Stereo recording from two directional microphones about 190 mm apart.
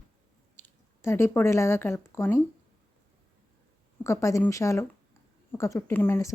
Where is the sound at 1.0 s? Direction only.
15° left (ahead or behind).